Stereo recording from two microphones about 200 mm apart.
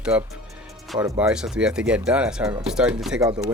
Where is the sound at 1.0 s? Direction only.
15° right (ahead or behind).